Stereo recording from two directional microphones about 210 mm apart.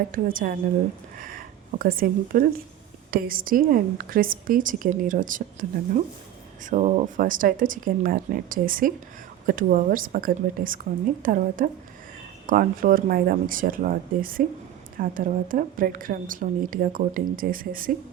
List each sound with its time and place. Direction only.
0.1 s a woman's voice: 40° right (ahead or behind)